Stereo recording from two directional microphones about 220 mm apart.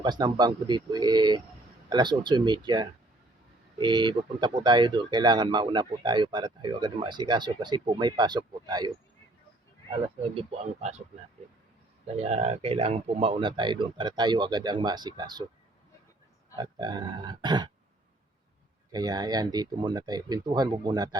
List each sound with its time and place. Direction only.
0.0 s speech: 20° right (ahead or behind)
10.3 s speech: 30° right (ahead or behind)
12.1 s speech: 30° right (ahead or behind)
16.6 s speech: 20° right (ahead or behind)
18.9 s speech: 20° right (ahead or behind)